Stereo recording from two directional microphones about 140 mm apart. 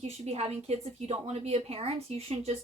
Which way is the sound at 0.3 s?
45° right (ahead or behind).